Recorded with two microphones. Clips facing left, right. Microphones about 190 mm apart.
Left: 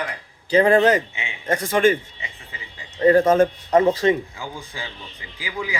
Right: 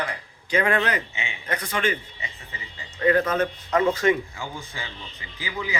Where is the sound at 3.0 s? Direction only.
40° left (ahead or behind).